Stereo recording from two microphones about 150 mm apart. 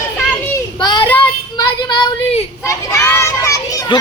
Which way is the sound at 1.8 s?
30° left (ahead or behind).